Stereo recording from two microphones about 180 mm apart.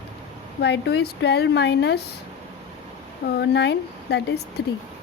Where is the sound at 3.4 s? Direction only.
70° left (ahead or behind).